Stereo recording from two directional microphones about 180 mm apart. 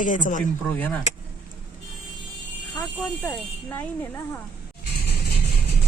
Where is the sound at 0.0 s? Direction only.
45° left (ahead or behind).